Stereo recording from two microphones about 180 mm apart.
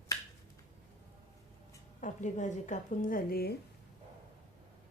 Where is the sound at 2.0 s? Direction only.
45° left (ahead or behind).